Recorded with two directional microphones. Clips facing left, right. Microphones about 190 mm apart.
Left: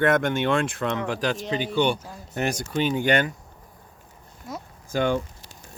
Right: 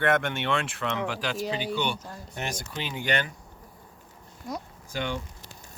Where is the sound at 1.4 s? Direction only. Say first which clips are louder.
Left 2 dB; 5° right (ahead or behind).